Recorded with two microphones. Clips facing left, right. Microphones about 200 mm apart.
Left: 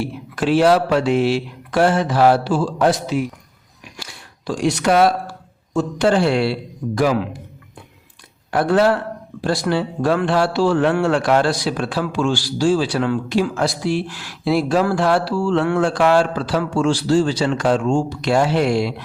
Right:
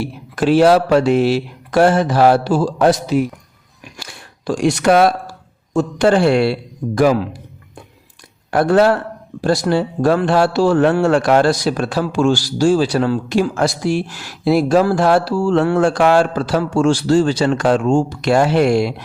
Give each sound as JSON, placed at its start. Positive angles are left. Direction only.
{"t": 0.3, "sound": "speech", "side_deg": -40}
{"t": 4.0, "sound": "a sound", "side_deg": -50}
{"t": 5.7, "sound": "speech", "side_deg": -50}
{"t": 6.8, "sound": "speech", "side_deg": -30}
{"t": 8.4, "sound": "speech", "side_deg": -45}